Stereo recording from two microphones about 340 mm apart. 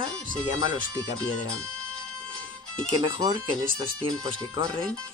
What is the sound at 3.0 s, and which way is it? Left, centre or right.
Speech, centre.